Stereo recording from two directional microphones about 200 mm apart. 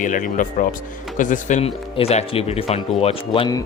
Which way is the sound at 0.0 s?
40° left (ahead or behind).